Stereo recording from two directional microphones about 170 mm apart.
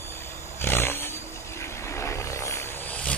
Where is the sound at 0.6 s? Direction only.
15° left (ahead or behind).